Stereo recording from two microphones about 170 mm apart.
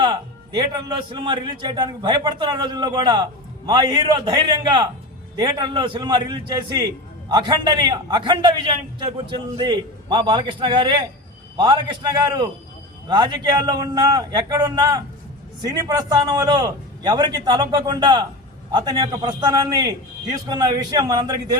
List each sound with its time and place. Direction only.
0.0 s music: 25° right (ahead or behind)
1.1 s a man's voice: 30° right (ahead or behind)